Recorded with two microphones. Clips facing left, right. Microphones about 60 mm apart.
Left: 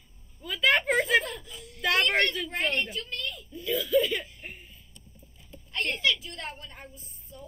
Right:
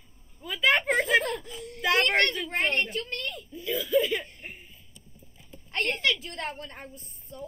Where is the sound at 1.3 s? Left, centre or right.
Right.